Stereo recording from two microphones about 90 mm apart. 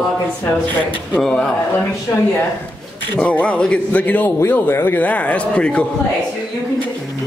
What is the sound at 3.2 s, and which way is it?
A man's voice, 15° left (ahead or behind).